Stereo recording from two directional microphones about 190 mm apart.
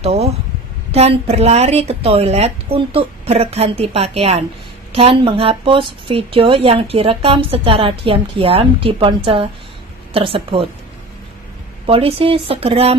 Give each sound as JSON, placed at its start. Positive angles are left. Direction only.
{"t": 0.0, "sound": "a sound", "side_deg": -35}
{"t": 0.9, "sound": "a woman's voice", "side_deg": -35}
{"t": 11.8, "sound": "a woman's voice", "side_deg": -30}